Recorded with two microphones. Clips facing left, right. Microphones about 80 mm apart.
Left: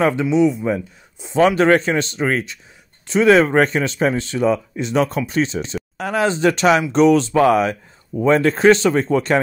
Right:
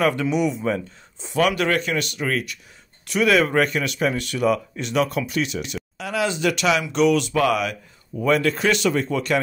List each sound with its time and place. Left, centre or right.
0.0 s speech: centre
1.3 s speech: left
5.9 s speech: left